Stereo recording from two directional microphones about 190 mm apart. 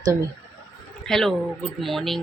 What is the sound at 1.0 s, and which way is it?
Speech, centre (ahead or behind).